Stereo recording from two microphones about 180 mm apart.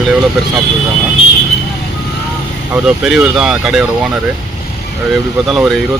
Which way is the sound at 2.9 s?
5° right (ahead or behind).